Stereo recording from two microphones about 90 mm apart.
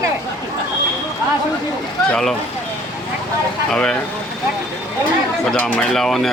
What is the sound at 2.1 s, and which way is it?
Speech, 5° left (ahead or behind).